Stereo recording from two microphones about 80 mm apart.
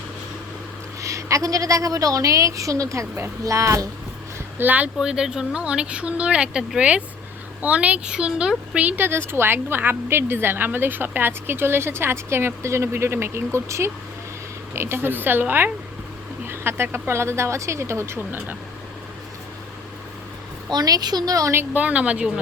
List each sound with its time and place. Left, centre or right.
1.0 s a woman's voice: right
4.5 s speech: right
4.9 s speech: centre
9.0 s speech: right
20.7 s speech: right
21.5 s speech: right